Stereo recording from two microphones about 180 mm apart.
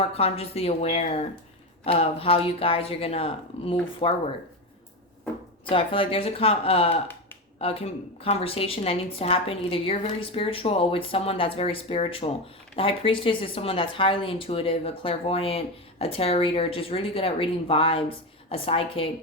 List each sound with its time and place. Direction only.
0.0 s speech: 35° left (ahead or behind)
5.6 s speech: 30° left (ahead or behind)